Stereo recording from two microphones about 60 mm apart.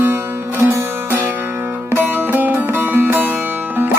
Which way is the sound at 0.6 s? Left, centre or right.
Right.